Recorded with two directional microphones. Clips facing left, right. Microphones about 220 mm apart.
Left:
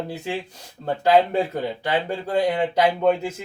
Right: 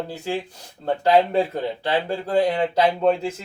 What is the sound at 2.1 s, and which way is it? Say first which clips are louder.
Speech: right 2 dB; 15° left (ahead or behind).